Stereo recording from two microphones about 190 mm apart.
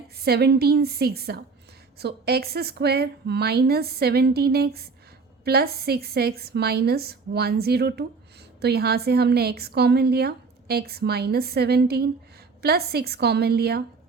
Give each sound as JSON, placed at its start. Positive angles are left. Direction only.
{"t": 0.3, "sound": "a woman's voice", "side_deg": -60}